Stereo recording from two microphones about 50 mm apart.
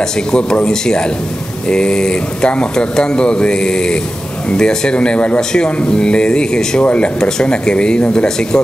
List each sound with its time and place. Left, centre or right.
0.3 s speech: centre
7.2 s speech: centre